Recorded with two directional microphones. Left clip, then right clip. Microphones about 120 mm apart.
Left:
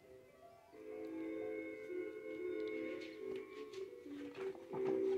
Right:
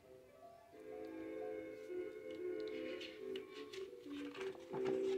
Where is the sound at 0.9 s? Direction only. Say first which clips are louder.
Left 3 dB; 30° left (ahead or behind).